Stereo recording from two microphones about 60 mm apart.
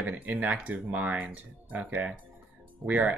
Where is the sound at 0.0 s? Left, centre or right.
Right.